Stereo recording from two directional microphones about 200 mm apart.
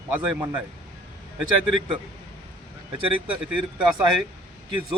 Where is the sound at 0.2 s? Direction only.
10° right (ahead or behind).